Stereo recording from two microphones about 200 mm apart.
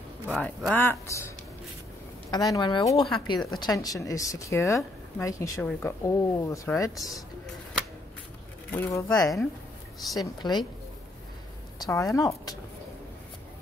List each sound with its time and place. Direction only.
0.3 s speech: centre (ahead or behind)
2.5 s speech: 20° left (ahead or behind)
8.7 s speech: 10° left (ahead or behind)
10.4 s speech: 20° left (ahead or behind)
11.8 s speech: 15° left (ahead or behind)